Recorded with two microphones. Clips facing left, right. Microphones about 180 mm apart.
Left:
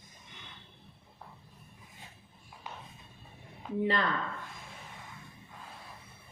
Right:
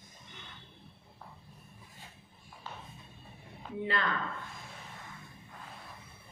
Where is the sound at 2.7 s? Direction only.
15° left (ahead or behind).